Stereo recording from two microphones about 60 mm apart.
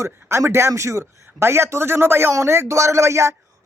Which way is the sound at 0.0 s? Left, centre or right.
Right.